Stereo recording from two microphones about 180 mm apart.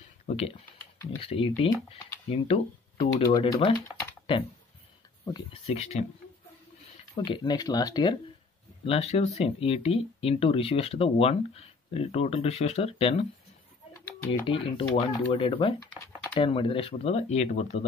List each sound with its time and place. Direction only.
0.3 s speech: 35° left (ahead or behind)
5.2 s speech: 30° left (ahead or behind)
7.2 s speech: 25° left (ahead or behind)
8.8 s speech: 35° left (ahead or behind)
13.9 s typing: 10° left (ahead or behind)
14.4 s speech: 30° left (ahead or behind)